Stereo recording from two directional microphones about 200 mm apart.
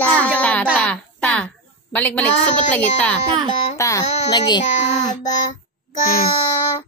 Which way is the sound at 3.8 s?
15° left (ahead or behind).